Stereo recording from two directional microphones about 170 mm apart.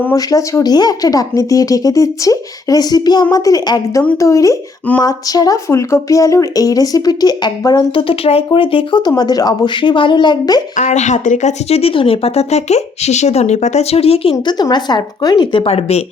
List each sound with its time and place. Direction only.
0.0 s speech: 20° left (ahead or behind)
10.8 s speech: 45° left (ahead or behind)